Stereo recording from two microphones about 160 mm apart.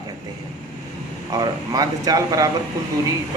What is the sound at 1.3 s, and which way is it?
Speech, 25° right (ahead or behind).